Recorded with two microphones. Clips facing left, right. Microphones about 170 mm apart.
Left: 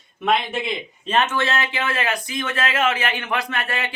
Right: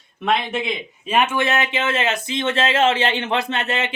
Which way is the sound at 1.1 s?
10° right (ahead or behind).